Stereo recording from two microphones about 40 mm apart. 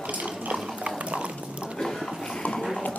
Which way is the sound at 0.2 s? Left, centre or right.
Right.